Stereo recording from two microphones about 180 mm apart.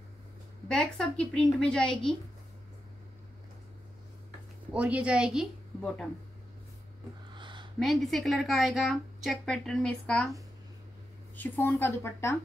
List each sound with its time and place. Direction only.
0.7 s a woman's voice: 5° left (ahead or behind)
4.7 s a woman's voice: 5° right (ahead or behind)
7.3 s a sound: 25° right (ahead or behind)
7.8 s a woman's voice: centre (ahead or behind)
11.3 s a woman's voice: 10° left (ahead or behind)